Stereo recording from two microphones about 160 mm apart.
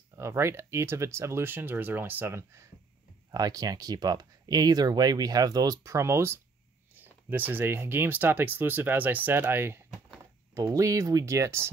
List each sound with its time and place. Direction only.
0.1 s speech: 15° right (ahead or behind)